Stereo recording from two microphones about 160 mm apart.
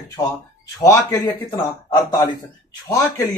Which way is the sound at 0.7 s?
20° left (ahead or behind).